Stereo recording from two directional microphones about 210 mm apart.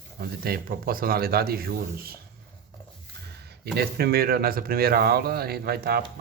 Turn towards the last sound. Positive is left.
turn(degrees=-45)  # may be behind; listen again after turning